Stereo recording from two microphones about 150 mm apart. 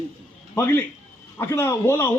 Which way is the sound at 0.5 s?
15° left (ahead or behind).